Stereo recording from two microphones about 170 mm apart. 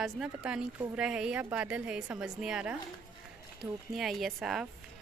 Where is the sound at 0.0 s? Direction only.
5° right (ahead or behind).